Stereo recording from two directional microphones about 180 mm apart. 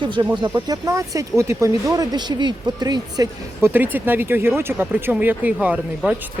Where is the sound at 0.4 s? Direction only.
20° right (ahead or behind).